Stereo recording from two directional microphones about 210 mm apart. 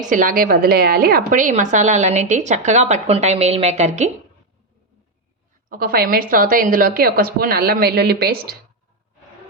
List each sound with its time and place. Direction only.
0.1 s a woman's voice: 40° right (ahead or behind)
5.6 s a woman's voice: 45° right (ahead or behind)